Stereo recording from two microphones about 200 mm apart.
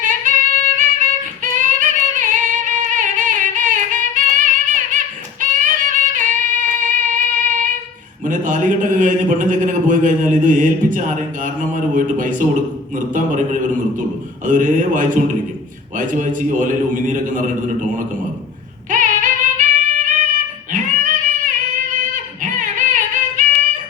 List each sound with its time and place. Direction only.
0.0 s music: 40° right (ahead or behind)
4.7 s female singing: 40° right (ahead or behind)
7.1 s music: 40° right (ahead or behind)
8.2 s a man's voice: 40° right (ahead or behind)
18.9 s music: 40° right (ahead or behind)
20.7 s female singing: 40° right (ahead or behind)
22.1 s music: 40° right (ahead or behind)